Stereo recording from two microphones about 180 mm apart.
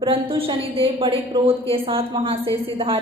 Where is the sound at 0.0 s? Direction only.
30° right (ahead or behind).